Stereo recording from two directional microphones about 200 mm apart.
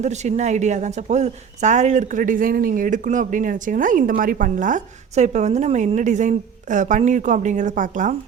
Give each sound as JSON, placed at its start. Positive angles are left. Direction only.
{"t": 0.0, "sound": "speech", "side_deg": -35}